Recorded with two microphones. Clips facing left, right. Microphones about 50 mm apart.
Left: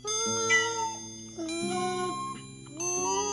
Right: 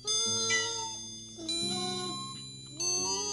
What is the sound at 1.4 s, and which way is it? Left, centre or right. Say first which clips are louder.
Music: left 6 dB; left.